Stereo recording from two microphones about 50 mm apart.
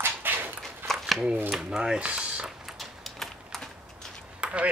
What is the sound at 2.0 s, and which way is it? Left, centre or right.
Speech, right.